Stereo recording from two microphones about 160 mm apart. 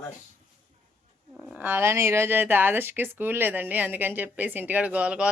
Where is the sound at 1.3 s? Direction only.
5° right (ahead or behind).